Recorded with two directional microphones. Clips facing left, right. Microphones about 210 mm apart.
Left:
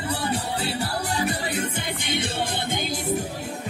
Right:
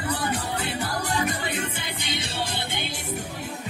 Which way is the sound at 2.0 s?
55° left (ahead or behind).